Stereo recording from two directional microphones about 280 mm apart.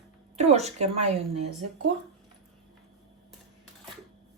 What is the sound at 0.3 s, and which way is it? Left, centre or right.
Speech, right.